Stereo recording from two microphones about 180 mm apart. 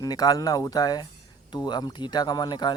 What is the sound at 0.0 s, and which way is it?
Speech, 20° left (ahead or behind).